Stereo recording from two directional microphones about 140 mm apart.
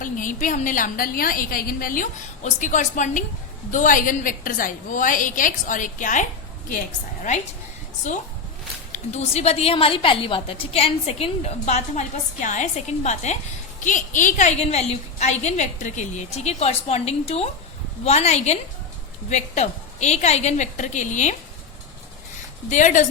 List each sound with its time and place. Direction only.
0.0 s a woman's voice: 75° left (ahead or behind)
8.9 s a woman's voice: 50° left (ahead or behind)
22.7 s a woman's voice: 60° left (ahead or behind)